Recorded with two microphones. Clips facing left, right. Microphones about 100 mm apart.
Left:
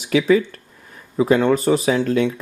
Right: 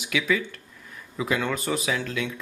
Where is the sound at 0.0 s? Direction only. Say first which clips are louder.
Left 10 dB; 40° left (ahead or behind).